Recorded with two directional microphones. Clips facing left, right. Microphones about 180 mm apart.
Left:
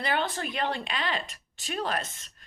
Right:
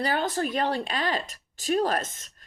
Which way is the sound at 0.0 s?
40° right (ahead or behind).